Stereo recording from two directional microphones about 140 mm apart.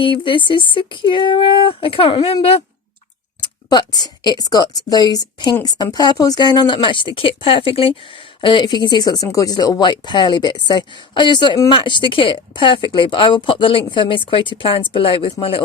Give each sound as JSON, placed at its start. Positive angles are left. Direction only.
{"t": 0.0, "sound": "speech", "side_deg": 35}
{"t": 3.4, "sound": "speech", "side_deg": 30}